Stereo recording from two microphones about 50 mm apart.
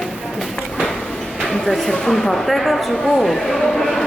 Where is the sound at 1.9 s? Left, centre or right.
Centre.